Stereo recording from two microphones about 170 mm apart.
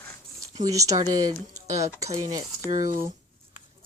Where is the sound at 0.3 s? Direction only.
20° right (ahead or behind).